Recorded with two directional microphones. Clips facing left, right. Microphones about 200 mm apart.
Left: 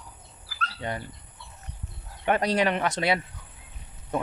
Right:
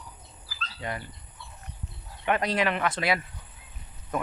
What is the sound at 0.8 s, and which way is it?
Speech, 30° left (ahead or behind).